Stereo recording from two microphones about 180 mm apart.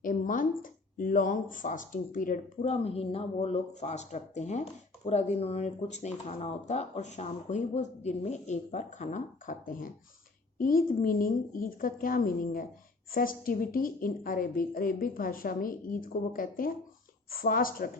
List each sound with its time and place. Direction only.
0.0 s a woman's voice: 45° left (ahead or behind)
2.6 s a woman's voice: 35° left (ahead or behind); by 17.9 s 50° left (ahead or behind)